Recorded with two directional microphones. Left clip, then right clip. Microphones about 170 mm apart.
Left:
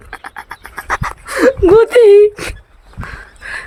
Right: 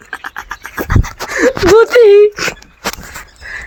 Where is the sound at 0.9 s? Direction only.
45° left (ahead or behind).